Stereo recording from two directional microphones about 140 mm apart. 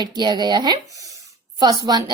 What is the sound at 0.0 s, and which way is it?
A woman's voice, 30° right (ahead or behind).